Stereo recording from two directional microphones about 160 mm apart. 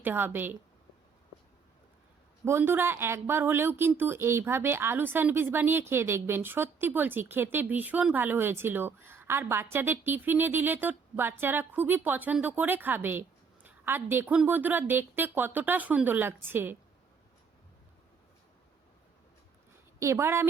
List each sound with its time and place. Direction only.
0.0 s a woman's voice: 10° right (ahead or behind)
2.4 s a woman's voice: 15° right (ahead or behind)
20.0 s a woman's voice: 20° right (ahead or behind)